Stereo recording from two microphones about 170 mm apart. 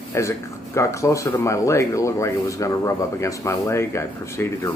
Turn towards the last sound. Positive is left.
turn(degrees=15)  # may be behind; listen again after turning